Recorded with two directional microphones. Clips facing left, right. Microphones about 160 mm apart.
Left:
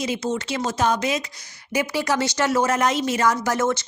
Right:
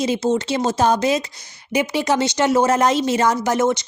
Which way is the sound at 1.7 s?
20° right (ahead or behind).